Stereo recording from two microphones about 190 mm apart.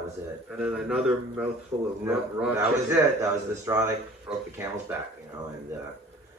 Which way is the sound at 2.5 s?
15° right (ahead or behind).